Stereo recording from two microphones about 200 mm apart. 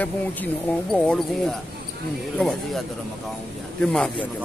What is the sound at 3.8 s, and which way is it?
Speech, 5° left (ahead or behind).